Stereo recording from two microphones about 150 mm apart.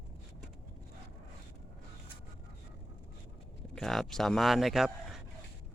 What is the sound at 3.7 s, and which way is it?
Speech, centre (ahead or behind).